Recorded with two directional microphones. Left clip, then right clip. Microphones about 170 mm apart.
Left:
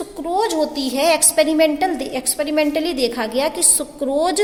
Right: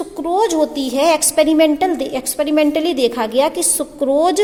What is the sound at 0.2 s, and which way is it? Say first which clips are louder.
A woman's voice: right 3 dB; 45° right (ahead or behind).